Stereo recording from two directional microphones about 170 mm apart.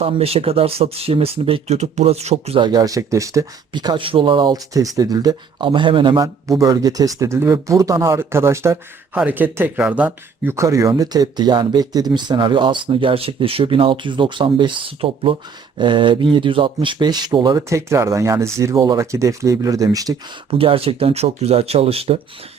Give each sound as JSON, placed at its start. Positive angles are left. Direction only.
{"t": 0.0, "sound": "speech", "side_deg": -35}
{"t": 2.6, "sound": "speech", "side_deg": -20}
{"t": 20.5, "sound": "speech", "side_deg": -35}